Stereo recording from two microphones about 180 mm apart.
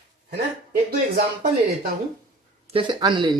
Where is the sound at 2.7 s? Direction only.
25° right (ahead or behind).